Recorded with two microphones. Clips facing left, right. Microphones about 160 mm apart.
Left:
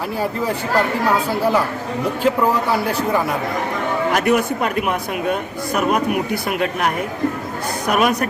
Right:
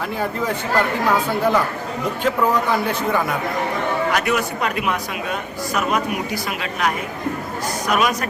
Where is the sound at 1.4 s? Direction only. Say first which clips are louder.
Left 1 dB; 5° left (ahead or behind).